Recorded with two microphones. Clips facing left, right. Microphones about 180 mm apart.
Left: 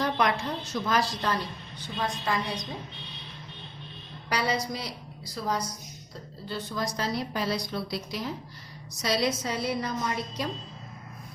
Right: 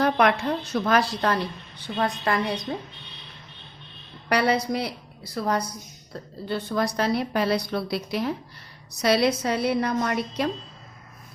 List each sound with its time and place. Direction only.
0.0 s a woman's voice: 60° right (ahead or behind)
4.3 s a woman's voice: 60° right (ahead or behind)